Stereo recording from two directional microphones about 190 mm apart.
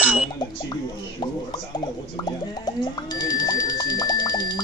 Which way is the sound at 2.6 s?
20° left (ahead or behind).